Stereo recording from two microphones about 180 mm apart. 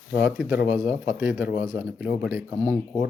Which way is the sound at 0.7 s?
15° right (ahead or behind).